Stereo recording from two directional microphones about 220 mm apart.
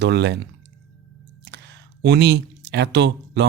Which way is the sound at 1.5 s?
50° right (ahead or behind).